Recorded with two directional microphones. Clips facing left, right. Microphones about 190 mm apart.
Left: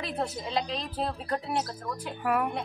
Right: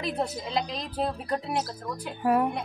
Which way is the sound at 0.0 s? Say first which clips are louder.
Right 2 dB; 15° right (ahead or behind).